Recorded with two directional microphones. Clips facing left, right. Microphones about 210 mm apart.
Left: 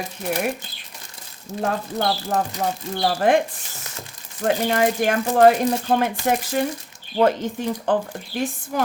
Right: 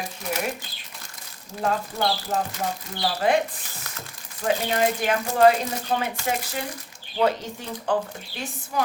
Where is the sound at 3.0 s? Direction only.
50° left (ahead or behind).